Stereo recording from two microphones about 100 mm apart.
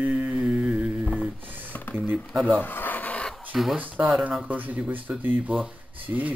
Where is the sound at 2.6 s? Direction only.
20° left (ahead or behind).